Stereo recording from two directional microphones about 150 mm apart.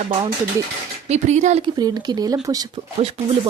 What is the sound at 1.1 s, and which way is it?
Speech, 50° right (ahead or behind).